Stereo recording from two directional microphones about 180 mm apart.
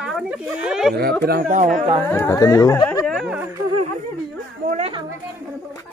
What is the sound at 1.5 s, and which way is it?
Speech, 45° right (ahead or behind).